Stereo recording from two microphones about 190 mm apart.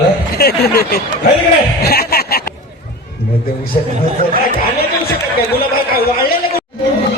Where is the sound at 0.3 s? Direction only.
55° left (ahead or behind).